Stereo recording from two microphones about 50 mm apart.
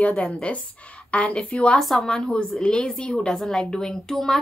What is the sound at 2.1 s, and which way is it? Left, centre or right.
A woman's voice, centre.